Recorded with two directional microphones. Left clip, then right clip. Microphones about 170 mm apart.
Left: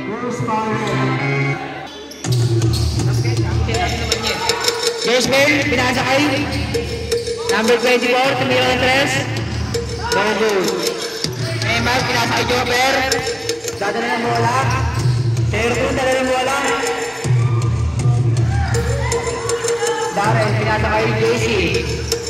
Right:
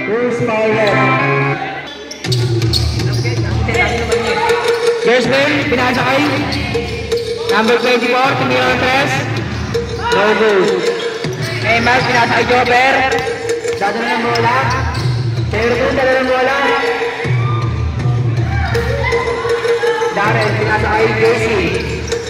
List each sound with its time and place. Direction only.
4.8 s music: 35° right (ahead or behind); by 6.4 s 55° right (ahead or behind)
7.1 s a man's voice: 55° right (ahead or behind); by 13.2 s 35° right (ahead or behind)
15.5 s speech: 25° left (ahead or behind)
20.9 s speech: 15° right (ahead or behind)